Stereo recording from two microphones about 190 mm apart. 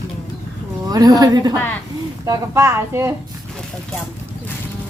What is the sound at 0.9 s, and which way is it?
A woman's voice, 20° right (ahead or behind).